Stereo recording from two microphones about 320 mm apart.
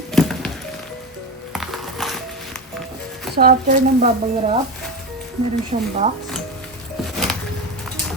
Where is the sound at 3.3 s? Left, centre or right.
Right.